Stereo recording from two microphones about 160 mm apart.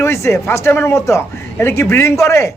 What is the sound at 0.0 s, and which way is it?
Speech, 15° left (ahead or behind).